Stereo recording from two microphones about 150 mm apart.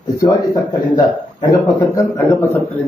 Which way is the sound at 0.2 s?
25° left (ahead or behind).